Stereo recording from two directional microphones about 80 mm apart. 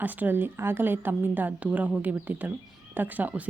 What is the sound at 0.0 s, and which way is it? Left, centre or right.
A woman's voice, right.